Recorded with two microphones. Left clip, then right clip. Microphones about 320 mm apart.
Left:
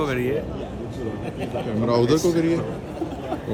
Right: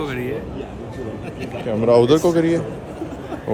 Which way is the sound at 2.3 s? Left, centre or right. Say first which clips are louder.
Right 4 dB; centre.